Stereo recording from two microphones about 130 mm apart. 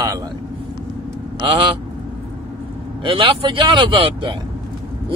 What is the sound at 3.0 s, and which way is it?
Speech, 40° right (ahead or behind).